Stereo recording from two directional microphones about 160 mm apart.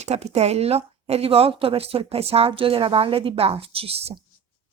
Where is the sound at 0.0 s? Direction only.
45° right (ahead or behind).